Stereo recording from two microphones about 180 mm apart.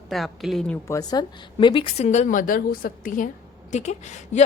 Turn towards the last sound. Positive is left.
turn(degrees=40)  # may be behind; listen again after turning